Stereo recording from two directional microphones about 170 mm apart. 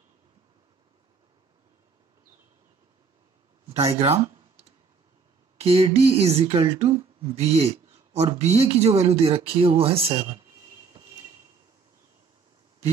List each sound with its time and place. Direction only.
3.6 s speech: 35° right (ahead or behind)
5.6 s speech: 35° right (ahead or behind)